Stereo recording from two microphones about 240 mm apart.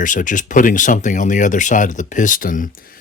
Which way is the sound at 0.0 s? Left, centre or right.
Left.